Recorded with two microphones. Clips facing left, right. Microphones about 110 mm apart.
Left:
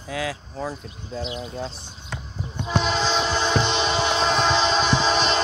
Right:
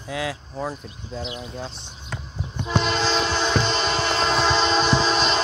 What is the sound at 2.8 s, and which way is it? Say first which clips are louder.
Train: even; 5° left (ahead or behind).